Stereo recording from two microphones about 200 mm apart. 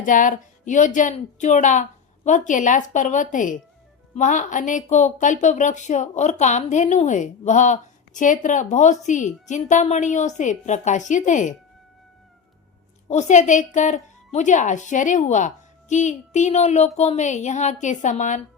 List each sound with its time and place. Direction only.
0.0 s speech: 40° left (ahead or behind)
13.1 s speech: 35° left (ahead or behind)